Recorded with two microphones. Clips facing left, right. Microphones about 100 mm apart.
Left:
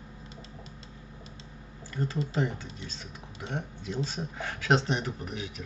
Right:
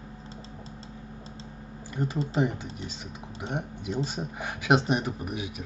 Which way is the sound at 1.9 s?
20° right (ahead or behind).